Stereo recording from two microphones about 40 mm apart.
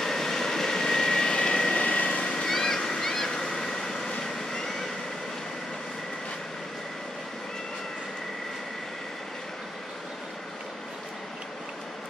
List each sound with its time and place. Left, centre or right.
0.0 s vehicle: centre; by 2.4 s left
2.4 s vehicle: centre